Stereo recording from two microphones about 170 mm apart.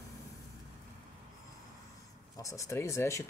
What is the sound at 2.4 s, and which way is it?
Speech, 20° left (ahead or behind).